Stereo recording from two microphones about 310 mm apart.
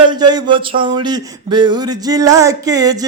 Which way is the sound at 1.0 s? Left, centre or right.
Centre.